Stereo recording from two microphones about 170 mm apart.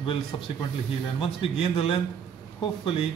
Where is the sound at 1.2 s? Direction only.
35° left (ahead or behind).